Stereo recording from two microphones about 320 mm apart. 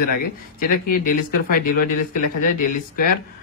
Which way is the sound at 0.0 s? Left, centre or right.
Left.